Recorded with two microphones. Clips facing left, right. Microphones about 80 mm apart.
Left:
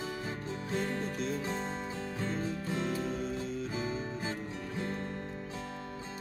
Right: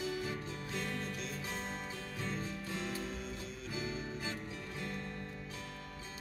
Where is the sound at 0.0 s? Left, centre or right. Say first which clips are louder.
Left 1 dB; left.